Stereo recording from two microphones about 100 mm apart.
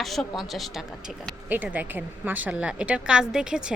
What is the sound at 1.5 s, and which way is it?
A woman's voice, 15° right (ahead or behind).